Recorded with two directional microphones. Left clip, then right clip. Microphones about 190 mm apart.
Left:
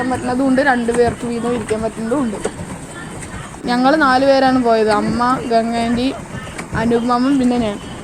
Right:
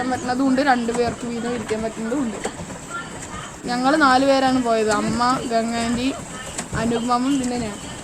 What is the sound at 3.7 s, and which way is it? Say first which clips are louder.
Speech: left 3 dB; 35° left (ahead or behind).